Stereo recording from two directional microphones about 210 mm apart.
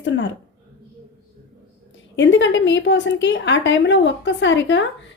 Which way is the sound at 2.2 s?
60° left (ahead or behind).